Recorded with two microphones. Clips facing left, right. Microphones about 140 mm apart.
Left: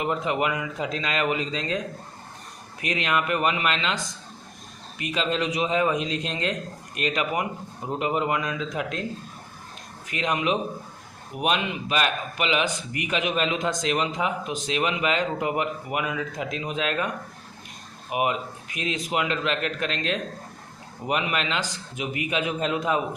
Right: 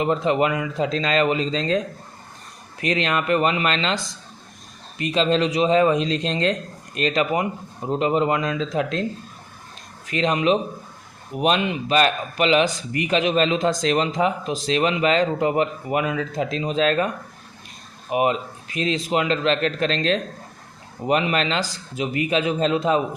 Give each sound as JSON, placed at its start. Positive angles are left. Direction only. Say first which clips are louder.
{"t": 0.0, "sound": "speech", "louder": "right 5 dB", "side_deg": -30}
{"t": 2.9, "sound": "a man's voice", "louder": "right 4 dB", "side_deg": -30}
{"t": 5.1, "sound": "a man's voice", "louder": "right 6 dB", "side_deg": -30}
{"t": 10.1, "sound": "a man's voice", "louder": "right 6 dB", "side_deg": -30}
{"t": 18.1, "sound": "a man's voice", "louder": "right 5 dB", "side_deg": -30}